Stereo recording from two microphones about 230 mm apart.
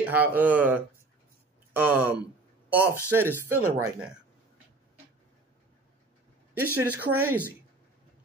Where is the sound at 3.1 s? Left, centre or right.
Centre.